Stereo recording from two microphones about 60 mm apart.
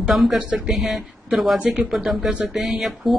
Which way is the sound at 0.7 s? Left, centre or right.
Centre.